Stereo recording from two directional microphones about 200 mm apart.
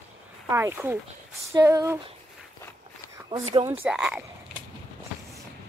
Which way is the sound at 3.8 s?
5° right (ahead or behind).